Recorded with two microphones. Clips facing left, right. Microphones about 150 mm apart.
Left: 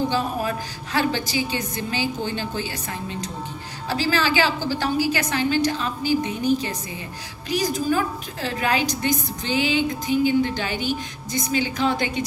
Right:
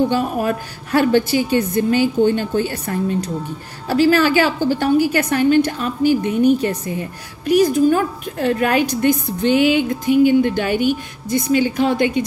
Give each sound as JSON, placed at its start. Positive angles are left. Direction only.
{"t": 0.1, "sound": "a woman's voice", "side_deg": -55}